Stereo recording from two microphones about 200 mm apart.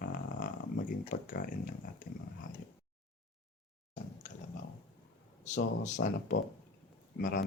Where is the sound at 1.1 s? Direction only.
45° left (ahead or behind).